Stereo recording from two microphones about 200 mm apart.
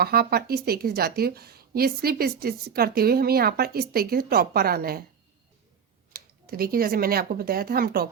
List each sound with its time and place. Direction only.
0.0 s speech: 50° right (ahead or behind)
6.1 s speech: 45° right (ahead or behind)